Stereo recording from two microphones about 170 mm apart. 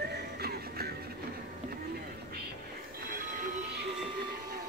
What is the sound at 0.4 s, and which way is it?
Music, 65° right (ahead or behind).